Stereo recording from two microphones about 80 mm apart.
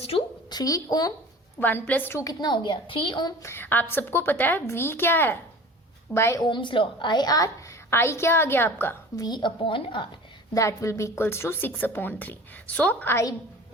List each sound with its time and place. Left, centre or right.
0.5 s a woman's voice: left
1.5 s a woman's voice: left
2.4 s a woman's voice: left
3.4 s a woman's voice: left
6.4 s a woman's voice: left
7.9 s a woman's voice: left
9.1 s a woman's voice: left
10.5 s a woman's voice: left; by 13.1 s centre